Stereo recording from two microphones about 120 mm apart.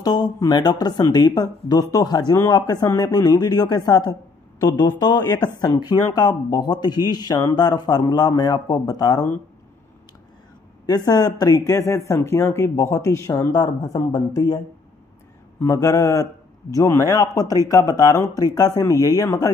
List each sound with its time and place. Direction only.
0.0 s a man's voice: 35° left (ahead or behind)
10.9 s speech: 35° left (ahead or behind)
15.6 s speech: 30° left (ahead or behind)